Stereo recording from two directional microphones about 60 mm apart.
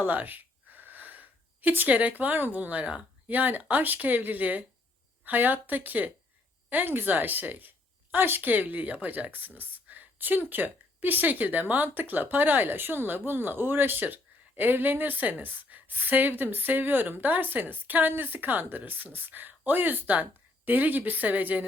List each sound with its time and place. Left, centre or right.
0.0 s speech: right